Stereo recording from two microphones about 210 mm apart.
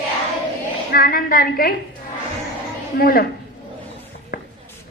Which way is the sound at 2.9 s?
45° left (ahead or behind).